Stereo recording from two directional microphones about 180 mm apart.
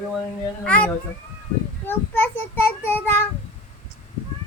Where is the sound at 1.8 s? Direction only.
10° left (ahead or behind).